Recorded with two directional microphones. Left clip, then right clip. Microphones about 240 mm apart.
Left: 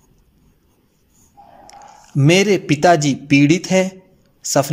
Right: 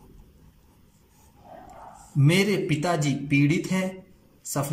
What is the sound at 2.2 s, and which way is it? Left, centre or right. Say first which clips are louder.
Speech: left 9 dB; left.